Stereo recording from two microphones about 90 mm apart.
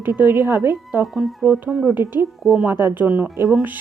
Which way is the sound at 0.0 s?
20° right (ahead or behind).